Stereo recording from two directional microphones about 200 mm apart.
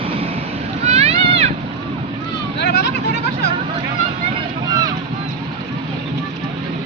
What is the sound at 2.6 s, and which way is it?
Vehicle, 55° left (ahead or behind).